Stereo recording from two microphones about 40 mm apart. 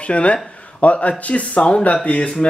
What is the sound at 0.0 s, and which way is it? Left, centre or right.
Speech, left.